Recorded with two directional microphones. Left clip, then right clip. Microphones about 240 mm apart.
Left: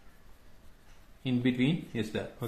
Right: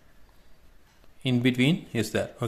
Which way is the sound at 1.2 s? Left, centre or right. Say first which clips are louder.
Right 5 dB; right.